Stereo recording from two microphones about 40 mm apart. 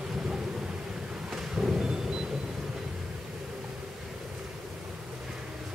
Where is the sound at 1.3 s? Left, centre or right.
Centre.